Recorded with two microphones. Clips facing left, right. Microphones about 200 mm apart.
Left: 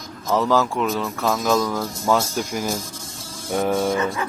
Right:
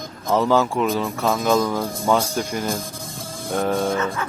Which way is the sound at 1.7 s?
15° right (ahead or behind).